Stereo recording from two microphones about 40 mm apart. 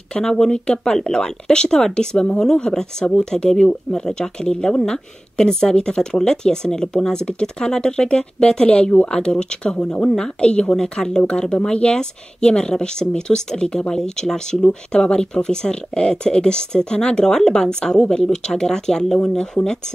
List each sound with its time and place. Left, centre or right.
0.1 s speech: centre; by 9.2 s left
9.2 s speech: left
10.8 s speech: centre